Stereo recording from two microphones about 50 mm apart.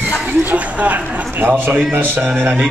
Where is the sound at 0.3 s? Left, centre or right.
Right.